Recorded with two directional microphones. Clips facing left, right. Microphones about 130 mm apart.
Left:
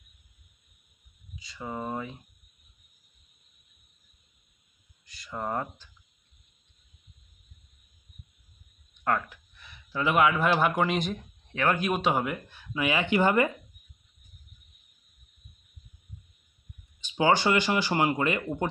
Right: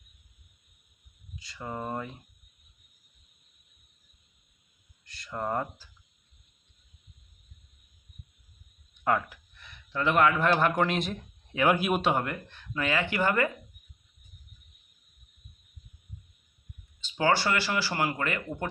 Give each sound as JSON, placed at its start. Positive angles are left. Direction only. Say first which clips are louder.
{"t": 1.4, "sound": "speech", "louder": "left 1 dB", "side_deg": 0}
{"t": 5.0, "sound": "speech", "louder": "right 1 dB", "side_deg": 0}
{"t": 9.0, "sound": "speech", "louder": "right 1 dB", "side_deg": -5}
{"t": 17.0, "sound": "speech", "louder": "left 2 dB", "side_deg": 15}